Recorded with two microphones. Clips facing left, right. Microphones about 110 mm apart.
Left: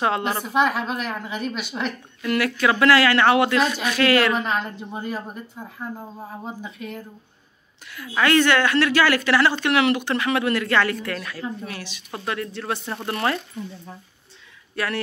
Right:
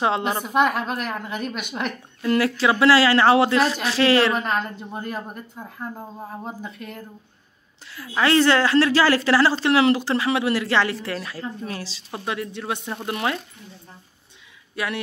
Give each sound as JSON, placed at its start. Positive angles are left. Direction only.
{"t": 0.2, "sound": "speech", "side_deg": -10}
{"t": 0.5, "sound": "a woman's voice", "side_deg": 0}
{"t": 2.2, "sound": "speech", "side_deg": -30}
{"t": 4.3, "sound": "a woman's voice", "side_deg": 0}
{"t": 8.2, "sound": "a woman's voice", "side_deg": -30}
{"t": 12.1, "sound": "speech", "side_deg": -20}
{"t": 12.9, "sound": "a woman's voice", "side_deg": -5}